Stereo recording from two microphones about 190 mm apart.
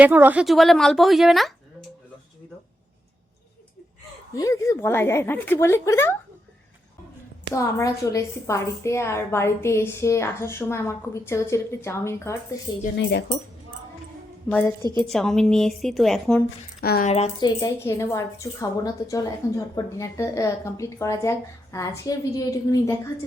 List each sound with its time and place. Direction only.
0.0 s speech: 10° right (ahead or behind)
4.4 s a woman's voice: 15° left (ahead or behind)
7.5 s a woman's voice: 15° left (ahead or behind)
13.0 s speech: 65° left (ahead or behind)
15.0 s speech: centre (ahead or behind)
16.8 s speech: 55° left (ahead or behind)
17.1 s a woman's voice: 35° left (ahead or behind)
17.4 s a woman's voice: 15° left (ahead or behind)